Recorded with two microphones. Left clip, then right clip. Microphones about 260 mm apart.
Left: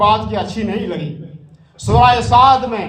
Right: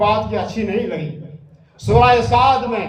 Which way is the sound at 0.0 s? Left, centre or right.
Centre.